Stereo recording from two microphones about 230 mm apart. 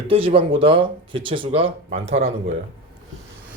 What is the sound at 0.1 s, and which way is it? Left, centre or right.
Speech, right.